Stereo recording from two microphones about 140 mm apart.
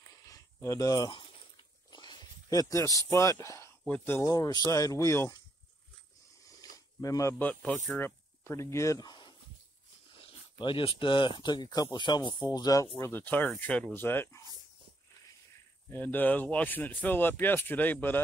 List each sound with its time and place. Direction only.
0.2 s a sound: 25° left (ahead or behind)
3.8 s speech: 10° left (ahead or behind)
4.3 s speech: 25° left (ahead or behind)
6.6 s speech: 25° left (ahead or behind)
13.0 s speech: 15° left (ahead or behind)
15.9 s speech: 15° left (ahead or behind)